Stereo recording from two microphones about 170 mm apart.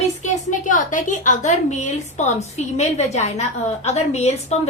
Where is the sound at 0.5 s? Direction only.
50° left (ahead or behind).